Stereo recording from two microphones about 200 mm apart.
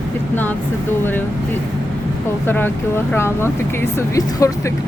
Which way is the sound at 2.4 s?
10° left (ahead or behind).